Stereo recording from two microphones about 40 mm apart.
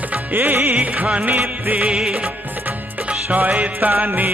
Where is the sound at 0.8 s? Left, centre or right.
Right.